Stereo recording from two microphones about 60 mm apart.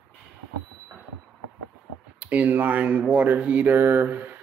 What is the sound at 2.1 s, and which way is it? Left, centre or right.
Speech, right.